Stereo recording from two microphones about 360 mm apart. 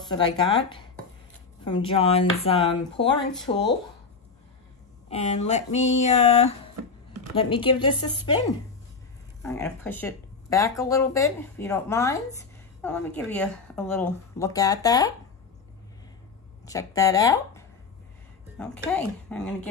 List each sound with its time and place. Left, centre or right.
0.1 s speech: centre
5.1 s speech: centre
9.4 s speech: centre
16.6 s speech: centre